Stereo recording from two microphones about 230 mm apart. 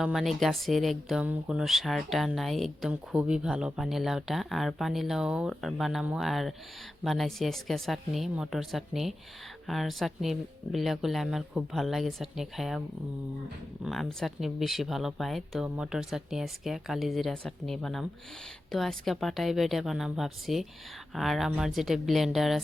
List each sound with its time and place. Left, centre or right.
0.0 s speech: centre
13.8 s speech: centre